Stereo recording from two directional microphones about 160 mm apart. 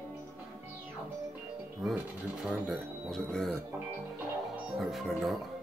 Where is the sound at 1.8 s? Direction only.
Centre (ahead or behind).